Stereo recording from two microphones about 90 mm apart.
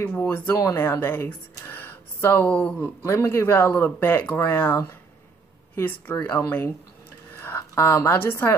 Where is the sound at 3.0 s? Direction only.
30° left (ahead or behind).